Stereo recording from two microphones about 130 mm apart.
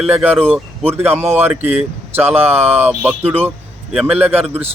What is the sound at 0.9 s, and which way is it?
Speech, 15° right (ahead or behind).